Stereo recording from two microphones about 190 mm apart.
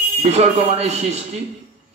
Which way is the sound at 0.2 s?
35° right (ahead or behind).